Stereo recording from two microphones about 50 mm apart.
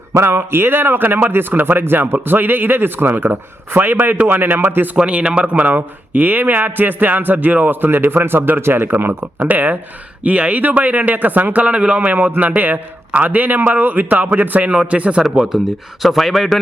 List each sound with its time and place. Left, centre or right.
0.2 s speech: right
4.9 s speech: right
11.6 s speech: right
15.5 s speech: centre